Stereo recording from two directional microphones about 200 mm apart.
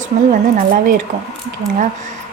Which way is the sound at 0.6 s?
40° right (ahead or behind).